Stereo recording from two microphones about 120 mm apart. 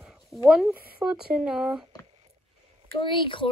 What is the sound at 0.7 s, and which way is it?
Speech, 10° right (ahead or behind).